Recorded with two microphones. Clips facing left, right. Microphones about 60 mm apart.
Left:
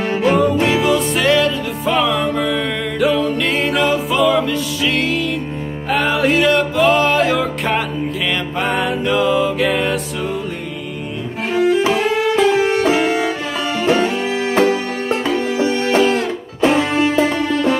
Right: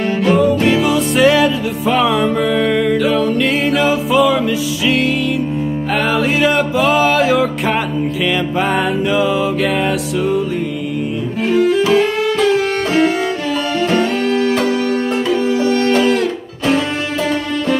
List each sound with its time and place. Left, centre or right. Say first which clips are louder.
0.4 s music: right 2 dB; centre
11.9 s music: right 2 dB; centre
14.4 s music: even; left